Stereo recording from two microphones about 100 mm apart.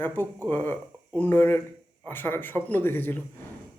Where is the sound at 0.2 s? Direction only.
20° left (ahead or behind).